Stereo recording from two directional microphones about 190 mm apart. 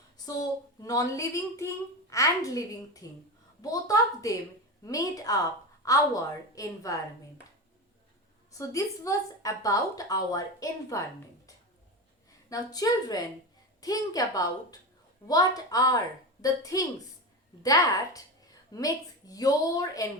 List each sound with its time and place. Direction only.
0.3 s a woman's voice: 20° left (ahead or behind)
8.5 s a woman's voice: 15° left (ahead or behind)
12.5 s a woman's voice: 20° left (ahead or behind)